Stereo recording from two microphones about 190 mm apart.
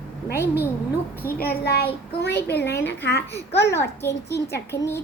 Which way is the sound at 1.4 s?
55° left (ahead or behind).